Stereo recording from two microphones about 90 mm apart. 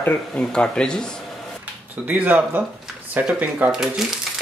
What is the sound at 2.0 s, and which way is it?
Speech, 15° right (ahead or behind).